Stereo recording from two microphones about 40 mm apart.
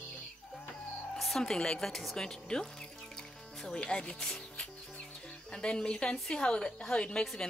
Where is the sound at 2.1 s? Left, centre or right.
Centre.